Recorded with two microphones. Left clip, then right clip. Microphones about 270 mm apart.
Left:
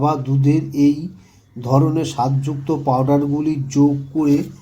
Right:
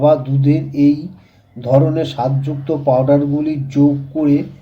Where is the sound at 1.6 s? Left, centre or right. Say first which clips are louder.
Right 4 dB; centre.